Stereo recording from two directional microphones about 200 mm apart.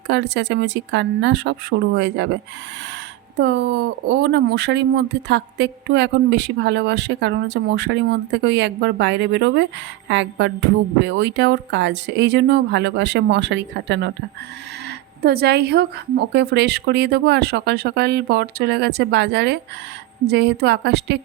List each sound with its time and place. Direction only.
0.1 s speech: 60° right (ahead or behind)
3.3 s speech: 60° right (ahead or behind)